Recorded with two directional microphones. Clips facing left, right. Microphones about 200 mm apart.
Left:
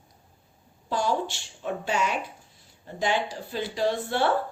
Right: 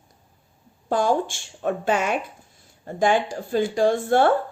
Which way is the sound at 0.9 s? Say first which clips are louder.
Right 5 dB; 50° right (ahead or behind).